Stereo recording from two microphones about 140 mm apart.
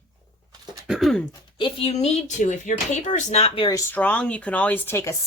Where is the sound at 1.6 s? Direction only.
45° left (ahead or behind).